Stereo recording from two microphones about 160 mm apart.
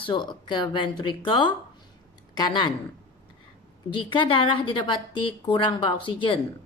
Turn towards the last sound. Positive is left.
turn(degrees=30)  # may be behind; listen again after turning